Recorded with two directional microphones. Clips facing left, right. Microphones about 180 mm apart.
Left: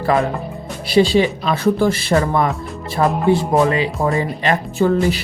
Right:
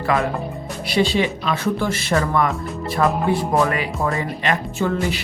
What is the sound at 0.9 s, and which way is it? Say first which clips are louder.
Speech: left 5 dB; 35° left (ahead or behind).